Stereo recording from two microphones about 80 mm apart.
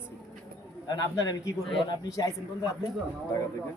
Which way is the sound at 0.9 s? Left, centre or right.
Left.